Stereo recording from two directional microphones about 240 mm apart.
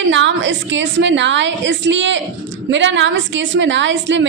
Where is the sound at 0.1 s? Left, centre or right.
Right.